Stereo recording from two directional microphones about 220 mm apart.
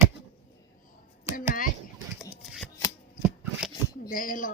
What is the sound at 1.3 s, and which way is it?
Speech, 40° left (ahead or behind).